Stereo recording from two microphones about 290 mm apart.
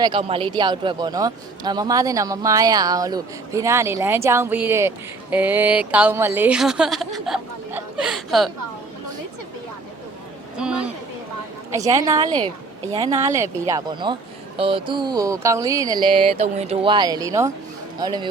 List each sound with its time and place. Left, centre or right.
0.0 s a man's voice: centre
10.6 s a man's voice: centre